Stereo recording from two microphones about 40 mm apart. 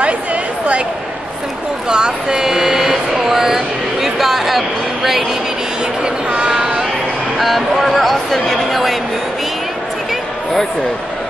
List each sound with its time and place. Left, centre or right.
1.9 s vehicle: centre
6.0 s a sound: right
7.3 s speech: centre